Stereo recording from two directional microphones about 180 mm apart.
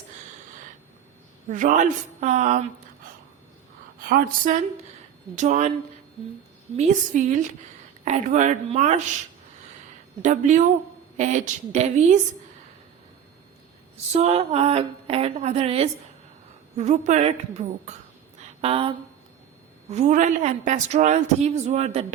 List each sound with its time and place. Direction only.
1.5 s a woman's voice: 45° right (ahead or behind)
4.1 s a woman's voice: 45° right (ahead or behind)
6.7 s a woman's voice: 40° right (ahead or behind)
10.2 s a woman's voice: 45° right (ahead or behind)
13.9 s a woman's voice: 35° right (ahead or behind)